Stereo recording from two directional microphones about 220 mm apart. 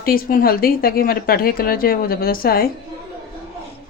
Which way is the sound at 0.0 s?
40° left (ahead or behind).